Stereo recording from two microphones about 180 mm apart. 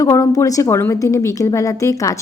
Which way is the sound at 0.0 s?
20° left (ahead or behind).